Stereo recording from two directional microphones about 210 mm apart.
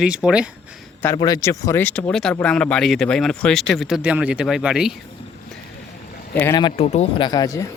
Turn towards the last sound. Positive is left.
turn(degrees=15)  # may be behind; listen again after turning